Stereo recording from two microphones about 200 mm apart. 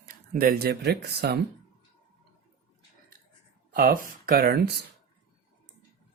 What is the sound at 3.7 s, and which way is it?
Speech, 45° right (ahead or behind).